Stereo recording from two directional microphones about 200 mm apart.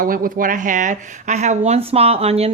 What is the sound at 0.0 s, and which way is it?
Speech, 45° right (ahead or behind).